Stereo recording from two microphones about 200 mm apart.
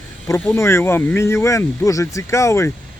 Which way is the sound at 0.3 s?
10° left (ahead or behind).